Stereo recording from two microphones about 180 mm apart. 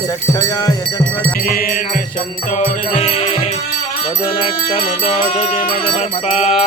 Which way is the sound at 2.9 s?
35° left (ahead or behind).